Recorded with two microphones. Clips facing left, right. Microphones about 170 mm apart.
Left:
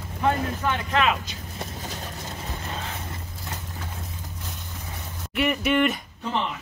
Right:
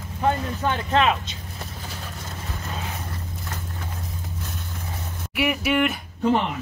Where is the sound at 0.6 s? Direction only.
30° right (ahead or behind).